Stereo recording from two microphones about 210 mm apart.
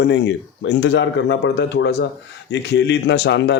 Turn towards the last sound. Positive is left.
turn(degrees=55)  # may be behind; listen again after turning